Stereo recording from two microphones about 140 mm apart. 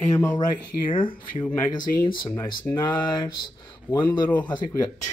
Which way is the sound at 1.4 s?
20° left (ahead or behind).